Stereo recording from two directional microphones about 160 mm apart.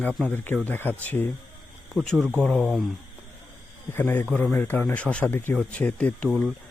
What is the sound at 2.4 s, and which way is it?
Speech, 5° left (ahead or behind).